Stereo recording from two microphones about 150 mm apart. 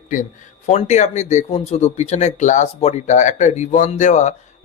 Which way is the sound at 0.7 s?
50° left (ahead or behind).